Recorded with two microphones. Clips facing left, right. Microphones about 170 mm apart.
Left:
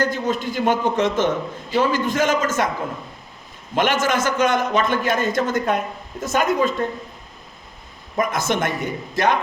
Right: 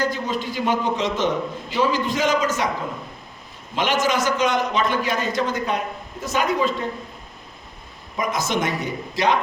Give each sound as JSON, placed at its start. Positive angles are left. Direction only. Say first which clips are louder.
{"t": 0.0, "sound": "a man's voice", "louder": "left 2 dB", "side_deg": 50}
{"t": 3.8, "sound": "a man's voice", "louder": "left 2 dB", "side_deg": 50}
{"t": 8.1, "sound": "a man's voice", "louder": "left 2 dB", "side_deg": 50}